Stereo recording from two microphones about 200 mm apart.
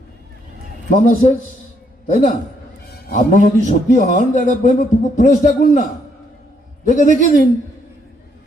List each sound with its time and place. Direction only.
0.9 s a man's voice: 40° left (ahead or behind)